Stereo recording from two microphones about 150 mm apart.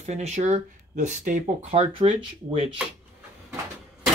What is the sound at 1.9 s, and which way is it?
Speech, 35° right (ahead or behind).